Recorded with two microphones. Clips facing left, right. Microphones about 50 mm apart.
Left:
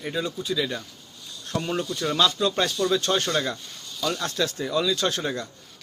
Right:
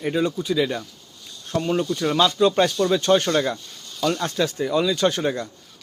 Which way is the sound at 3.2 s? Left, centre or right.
Centre.